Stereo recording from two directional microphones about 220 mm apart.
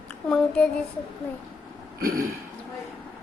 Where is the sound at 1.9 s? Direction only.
40° right (ahead or behind).